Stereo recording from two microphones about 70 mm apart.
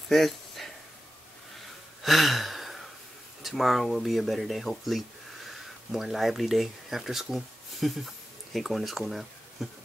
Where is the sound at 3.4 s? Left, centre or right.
Centre.